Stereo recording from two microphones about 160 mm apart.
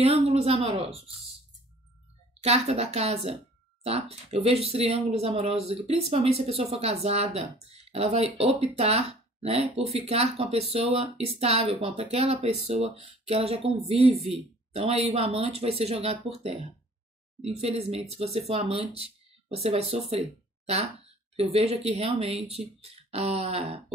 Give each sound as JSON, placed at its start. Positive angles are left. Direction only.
{"t": 0.0, "sound": "speech", "side_deg": -40}
{"t": 2.4, "sound": "speech", "side_deg": -40}
{"t": 17.6, "sound": "speech", "side_deg": -40}